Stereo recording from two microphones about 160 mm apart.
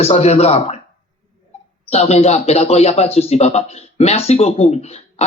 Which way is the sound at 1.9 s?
40° left (ahead or behind).